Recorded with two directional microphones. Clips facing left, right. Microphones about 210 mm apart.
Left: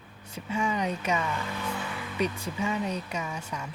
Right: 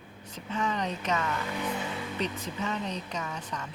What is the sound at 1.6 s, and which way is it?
Speech, 20° right (ahead or behind).